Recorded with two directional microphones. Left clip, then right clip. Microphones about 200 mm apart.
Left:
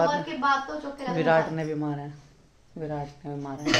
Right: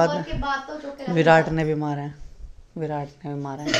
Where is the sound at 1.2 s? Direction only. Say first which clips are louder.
Right 6 dB; 35° right (ahead or behind).